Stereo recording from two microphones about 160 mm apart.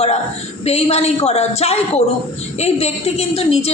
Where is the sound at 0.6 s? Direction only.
40° left (ahead or behind).